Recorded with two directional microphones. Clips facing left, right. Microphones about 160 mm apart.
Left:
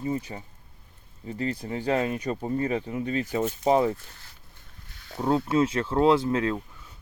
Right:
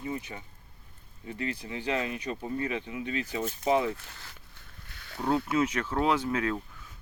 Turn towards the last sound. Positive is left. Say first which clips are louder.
# left 6 dB
turn(degrees=30)  # may be behind; listen again after turning